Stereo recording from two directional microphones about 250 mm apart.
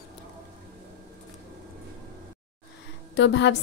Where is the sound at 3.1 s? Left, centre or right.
Left.